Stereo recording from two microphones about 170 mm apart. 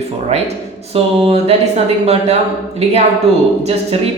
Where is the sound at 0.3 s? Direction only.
40° right (ahead or behind).